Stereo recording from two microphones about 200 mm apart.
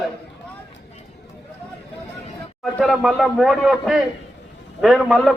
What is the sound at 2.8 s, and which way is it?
A man's voice, centre (ahead or behind).